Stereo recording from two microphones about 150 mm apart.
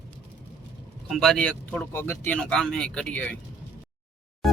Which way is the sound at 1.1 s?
Centre (ahead or behind).